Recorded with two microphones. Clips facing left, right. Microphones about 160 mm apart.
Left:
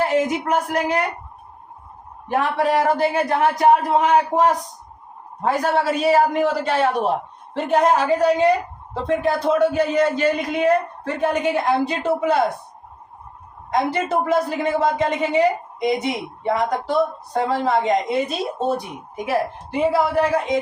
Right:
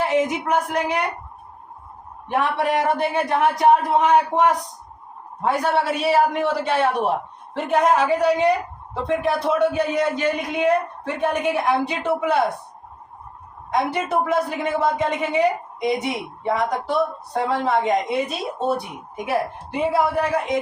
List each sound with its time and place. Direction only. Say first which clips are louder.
0.0 s a man's voice: left 1 dB; 40° left (ahead or behind)
2.3 s a man's voice: left 2 dB; 35° left (ahead or behind)
13.7 s a man's voice: left 1 dB; 35° left (ahead or behind)
19.9 s a man's voice: left 1 dB; 30° left (ahead or behind)